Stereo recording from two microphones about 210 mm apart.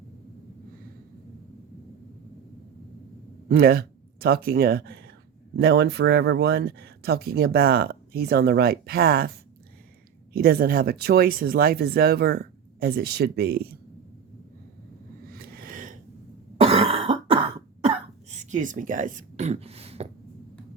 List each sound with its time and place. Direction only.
3.5 s speech: 45° right (ahead or behind)
10.3 s speech: 45° right (ahead or behind)
15.3 s a sound: 45° right (ahead or behind)
16.6 s throat clearing: 30° right (ahead or behind)
18.5 s speech: 40° right (ahead or behind)